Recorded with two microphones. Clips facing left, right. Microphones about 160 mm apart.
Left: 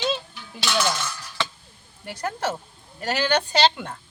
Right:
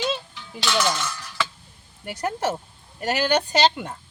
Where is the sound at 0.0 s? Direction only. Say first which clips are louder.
Even; centre (ahead or behind).